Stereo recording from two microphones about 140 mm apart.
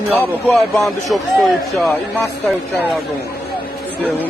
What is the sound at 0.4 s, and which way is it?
Speech, centre (ahead or behind).